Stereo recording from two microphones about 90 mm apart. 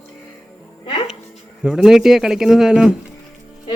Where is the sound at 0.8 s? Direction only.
85° left.